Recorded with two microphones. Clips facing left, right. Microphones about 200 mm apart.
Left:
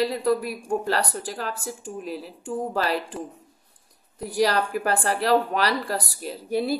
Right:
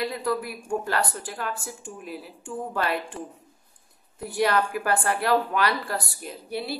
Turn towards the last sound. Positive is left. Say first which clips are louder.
# left 7 dB
turn(degrees=40)  # may be behind; listen again after turning